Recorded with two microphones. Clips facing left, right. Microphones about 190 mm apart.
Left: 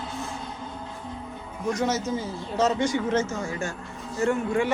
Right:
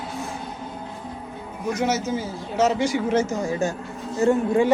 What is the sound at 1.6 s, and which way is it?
Speech, 5° right (ahead or behind).